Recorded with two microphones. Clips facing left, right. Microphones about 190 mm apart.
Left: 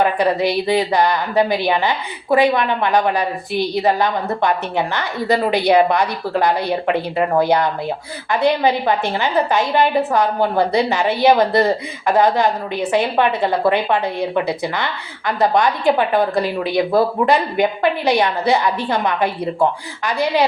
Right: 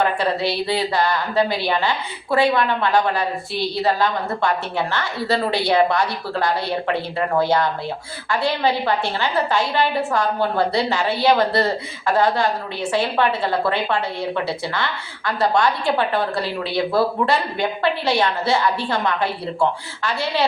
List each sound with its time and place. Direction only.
0.0 s speech: 15° left (ahead or behind)